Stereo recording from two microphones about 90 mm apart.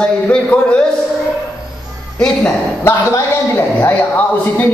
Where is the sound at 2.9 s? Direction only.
30° left (ahead or behind).